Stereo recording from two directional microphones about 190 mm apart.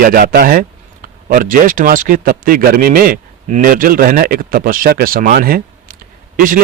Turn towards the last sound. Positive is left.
turn(degrees=-45)  # may be behind; listen again after turning